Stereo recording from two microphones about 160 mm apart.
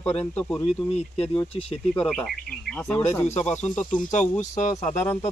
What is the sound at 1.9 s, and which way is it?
Speech, 5° left (ahead or behind).